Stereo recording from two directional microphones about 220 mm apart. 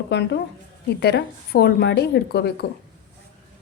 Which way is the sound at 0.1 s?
50° left (ahead or behind).